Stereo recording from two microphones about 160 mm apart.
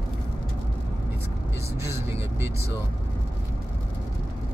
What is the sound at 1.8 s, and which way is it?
Speech, 15° right (ahead or behind).